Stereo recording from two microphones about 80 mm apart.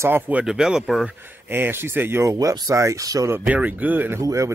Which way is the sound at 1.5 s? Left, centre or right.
Right.